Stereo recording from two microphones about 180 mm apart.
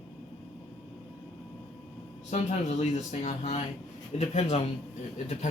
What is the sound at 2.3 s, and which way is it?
Speech, 40° left (ahead or behind).